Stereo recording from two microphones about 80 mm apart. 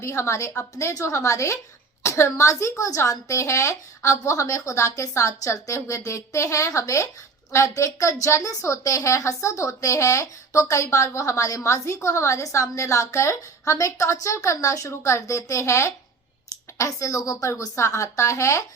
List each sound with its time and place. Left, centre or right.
0.0 s a woman's voice: left